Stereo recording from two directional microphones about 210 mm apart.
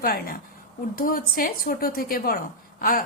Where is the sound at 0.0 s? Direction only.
45° left (ahead or behind).